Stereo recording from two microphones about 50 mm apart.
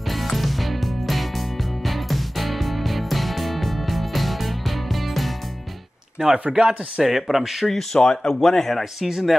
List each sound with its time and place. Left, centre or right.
0.4 s music: centre
6.2 s speech: centre
6.5 s speech: centre
7.0 s speech: centre